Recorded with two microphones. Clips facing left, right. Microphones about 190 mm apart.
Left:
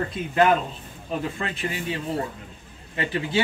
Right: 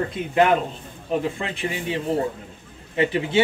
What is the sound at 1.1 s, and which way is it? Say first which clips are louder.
Speech: right 4 dB; 20° right (ahead or behind).